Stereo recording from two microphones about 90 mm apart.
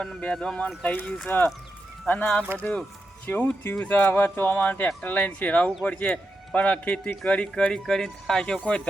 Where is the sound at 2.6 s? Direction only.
15° left (ahead or behind).